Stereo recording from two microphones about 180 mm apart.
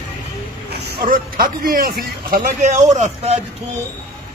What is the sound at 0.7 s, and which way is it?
Speech, 55° right (ahead or behind).